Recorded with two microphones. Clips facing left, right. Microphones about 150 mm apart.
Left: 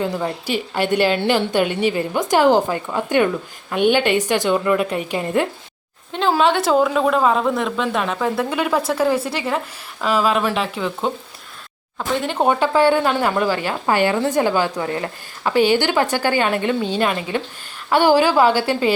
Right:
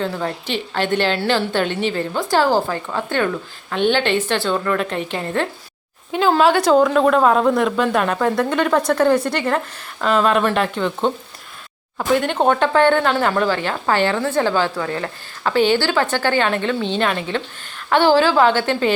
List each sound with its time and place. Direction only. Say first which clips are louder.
0.0 s speech: left 1 dB; 15° left (ahead or behind)
6.1 s a woman's voice: right 2 dB; 5° right (ahead or behind)